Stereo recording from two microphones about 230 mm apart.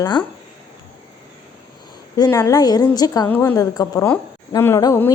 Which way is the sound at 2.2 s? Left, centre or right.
Centre.